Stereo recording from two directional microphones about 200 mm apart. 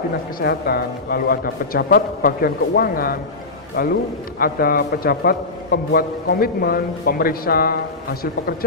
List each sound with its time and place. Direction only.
0.4 s a man's voice: 50° left (ahead or behind)
4.4 s a man's voice: 50° left (ahead or behind)